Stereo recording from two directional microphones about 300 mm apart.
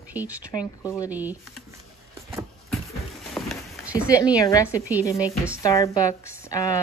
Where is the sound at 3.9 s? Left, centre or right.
Centre.